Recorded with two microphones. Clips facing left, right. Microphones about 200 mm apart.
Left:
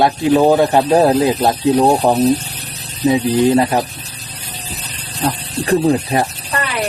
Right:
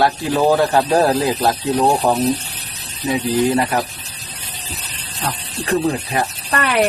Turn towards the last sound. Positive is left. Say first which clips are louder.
# right 4 dB
turn(degrees=-60)  # may be behind; listen again after turning